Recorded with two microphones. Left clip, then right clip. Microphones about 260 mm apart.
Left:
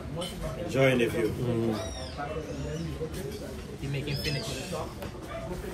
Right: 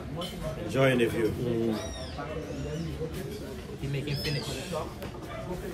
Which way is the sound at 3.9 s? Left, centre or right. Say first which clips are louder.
Even; centre.